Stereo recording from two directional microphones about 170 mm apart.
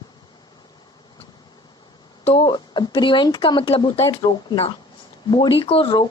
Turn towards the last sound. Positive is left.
turn(degrees=30)  # may be behind; listen again after turning